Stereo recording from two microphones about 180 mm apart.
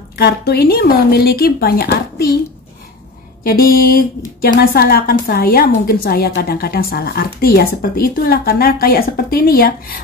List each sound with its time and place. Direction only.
0.1 s a woman's voice: 60° left (ahead or behind)
3.4 s a sound: 55° left (ahead or behind)
4.4 s a woman's voice: 55° left (ahead or behind)